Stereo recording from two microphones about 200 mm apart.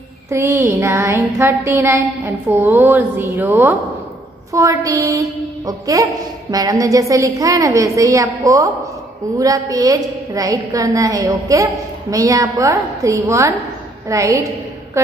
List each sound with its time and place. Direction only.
0.3 s a woman's voice: 15° right (ahead or behind)